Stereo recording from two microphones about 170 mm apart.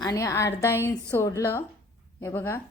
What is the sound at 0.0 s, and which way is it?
A woman's voice, 20° left (ahead or behind).